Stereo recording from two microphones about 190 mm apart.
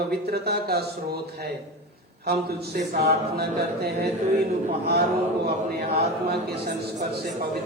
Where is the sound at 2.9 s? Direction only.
55° right (ahead or behind).